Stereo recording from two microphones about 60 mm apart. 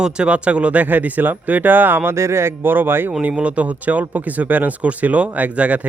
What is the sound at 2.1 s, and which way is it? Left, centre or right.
Speech, right.